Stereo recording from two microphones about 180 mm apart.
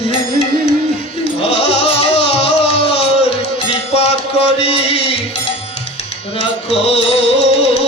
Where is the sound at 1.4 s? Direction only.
35° left (ahead or behind).